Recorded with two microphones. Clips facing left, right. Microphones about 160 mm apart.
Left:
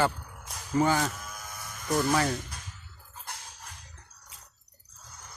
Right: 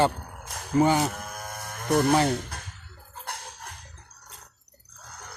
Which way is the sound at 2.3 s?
60° right (ahead or behind).